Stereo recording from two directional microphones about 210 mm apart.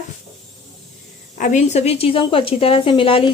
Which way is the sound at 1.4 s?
35° left (ahead or behind).